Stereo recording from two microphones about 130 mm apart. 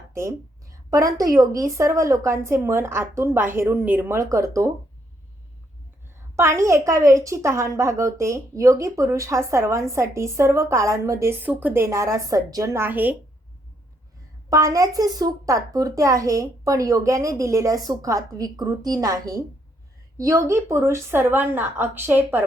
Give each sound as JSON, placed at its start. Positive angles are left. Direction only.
{"t": 0.1, "sound": "a woman's voice", "side_deg": -25}
{"t": 6.3, "sound": "a woman's voice", "side_deg": -20}
{"t": 14.5, "sound": "a woman's voice", "side_deg": -25}